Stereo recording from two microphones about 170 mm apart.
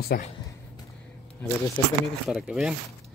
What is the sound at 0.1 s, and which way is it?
Speech, 65° left (ahead or behind).